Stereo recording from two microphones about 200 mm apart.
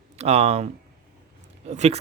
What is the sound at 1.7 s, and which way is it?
Speech, 35° right (ahead or behind).